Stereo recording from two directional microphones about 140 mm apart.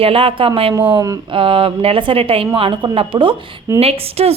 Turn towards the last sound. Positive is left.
turn(degrees=-45)  # may be behind; listen again after turning